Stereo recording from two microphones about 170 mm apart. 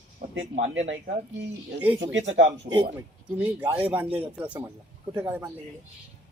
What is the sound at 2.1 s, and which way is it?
Speech, 90° right.